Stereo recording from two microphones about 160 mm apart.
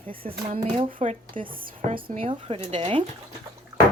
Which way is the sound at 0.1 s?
35° right (ahead or behind).